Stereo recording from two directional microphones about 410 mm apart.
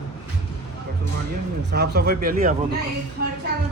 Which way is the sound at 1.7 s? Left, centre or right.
Right.